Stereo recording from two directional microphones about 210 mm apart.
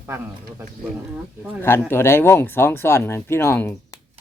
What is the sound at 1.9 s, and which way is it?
Speech, 10° left (ahead or behind).